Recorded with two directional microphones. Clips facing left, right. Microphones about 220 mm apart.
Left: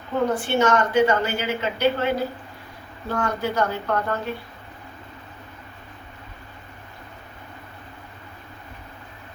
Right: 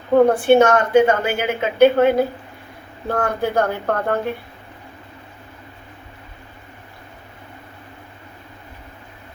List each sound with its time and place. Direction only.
0.1 s a woman's voice: 55° right (ahead or behind)